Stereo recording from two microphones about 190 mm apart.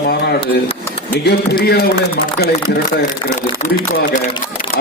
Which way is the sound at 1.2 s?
60° left (ahead or behind).